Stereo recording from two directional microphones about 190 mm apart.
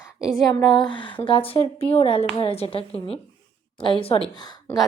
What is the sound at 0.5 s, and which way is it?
A woman's voice, 25° left (ahead or behind).